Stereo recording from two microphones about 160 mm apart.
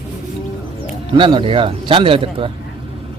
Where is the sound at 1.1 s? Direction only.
30° right (ahead or behind).